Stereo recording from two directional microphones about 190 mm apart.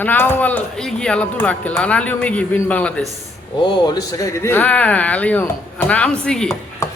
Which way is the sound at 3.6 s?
20° left (ahead or behind).